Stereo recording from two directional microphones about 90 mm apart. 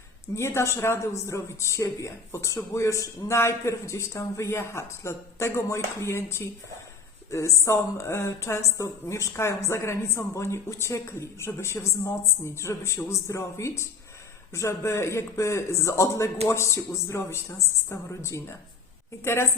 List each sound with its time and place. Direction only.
0.3 s a man's voice: 30° left (ahead or behind)